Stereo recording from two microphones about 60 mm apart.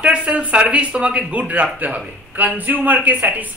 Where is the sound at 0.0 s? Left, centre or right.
Right.